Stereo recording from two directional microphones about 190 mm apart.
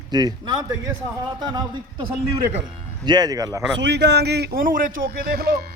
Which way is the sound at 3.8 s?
60° right (ahead or behind).